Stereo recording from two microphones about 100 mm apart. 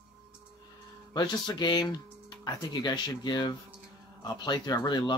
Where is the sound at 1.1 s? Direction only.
45° left (ahead or behind).